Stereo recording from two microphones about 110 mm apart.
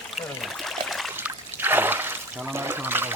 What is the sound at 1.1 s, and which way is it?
Trickle, 20° right (ahead or behind).